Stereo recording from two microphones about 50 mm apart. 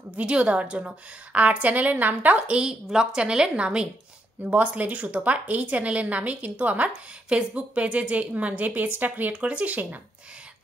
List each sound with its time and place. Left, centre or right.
0.1 s speech: right
7.2 s speech: right
9.3 s speech: right